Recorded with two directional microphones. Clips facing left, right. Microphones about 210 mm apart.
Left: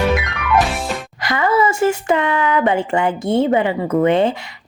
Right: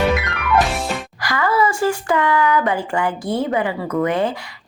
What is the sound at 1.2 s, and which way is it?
Speech, 25° left (ahead or behind).